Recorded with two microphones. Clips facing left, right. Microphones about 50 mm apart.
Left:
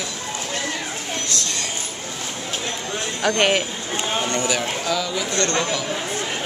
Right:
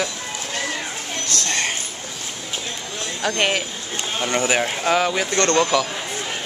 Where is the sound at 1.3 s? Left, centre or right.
Right.